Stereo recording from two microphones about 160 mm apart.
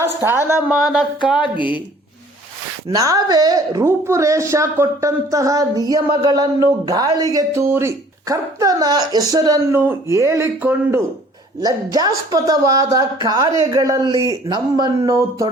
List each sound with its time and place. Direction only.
0.0 s a woman's voice: 15° right (ahead or behind)
0.7 s a sound: centre (ahead or behind)
1.4 s speech: 30° left (ahead or behind)
2.9 s a woman's voice: 20° right (ahead or behind)